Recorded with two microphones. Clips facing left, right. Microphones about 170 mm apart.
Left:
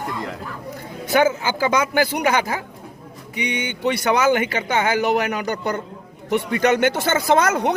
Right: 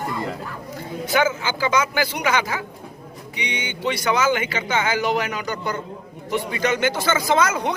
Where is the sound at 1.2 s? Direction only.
45° left (ahead or behind).